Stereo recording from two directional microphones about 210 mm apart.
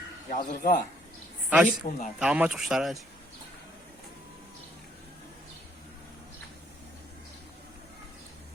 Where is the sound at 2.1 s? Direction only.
5° right (ahead or behind).